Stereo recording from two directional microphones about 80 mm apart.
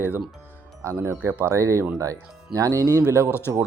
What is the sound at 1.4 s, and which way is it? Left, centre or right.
Speech, right.